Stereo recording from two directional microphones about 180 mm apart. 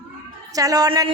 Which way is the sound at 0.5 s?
20° right (ahead or behind).